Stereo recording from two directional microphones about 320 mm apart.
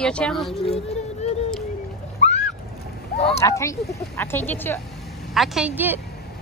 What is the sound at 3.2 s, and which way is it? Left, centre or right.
A woman's voice, centre.